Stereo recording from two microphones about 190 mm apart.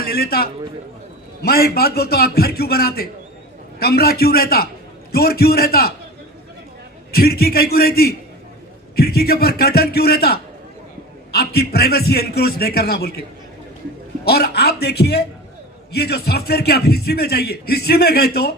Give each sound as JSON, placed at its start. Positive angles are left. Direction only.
{"t": 0.0, "sound": "a man's voice", "side_deg": 55}
{"t": 7.1, "sound": "a man's voice", "side_deg": 55}
{"t": 14.3, "sound": "a man's voice", "side_deg": 55}